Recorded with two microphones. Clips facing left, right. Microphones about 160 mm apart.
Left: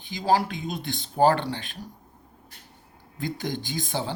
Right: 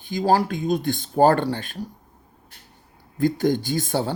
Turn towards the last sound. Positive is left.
turn(degrees=-45)  # may be behind; listen again after turning